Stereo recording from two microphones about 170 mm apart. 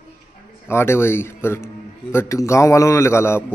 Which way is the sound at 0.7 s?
15° left (ahead or behind).